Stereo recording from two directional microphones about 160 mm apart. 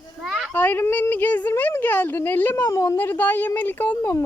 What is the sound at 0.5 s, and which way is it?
Speech, 10° left (ahead or behind).